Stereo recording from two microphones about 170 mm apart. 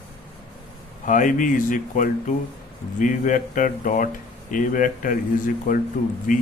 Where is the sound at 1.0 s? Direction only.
50° left (ahead or behind).